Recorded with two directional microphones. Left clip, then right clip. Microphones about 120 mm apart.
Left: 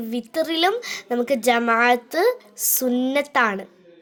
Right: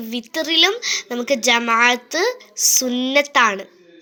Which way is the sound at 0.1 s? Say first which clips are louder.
Right 4 dB; 50° left (ahead or behind).